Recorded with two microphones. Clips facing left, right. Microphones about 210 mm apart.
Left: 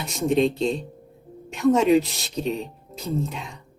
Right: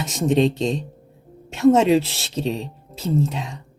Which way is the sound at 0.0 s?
80° right.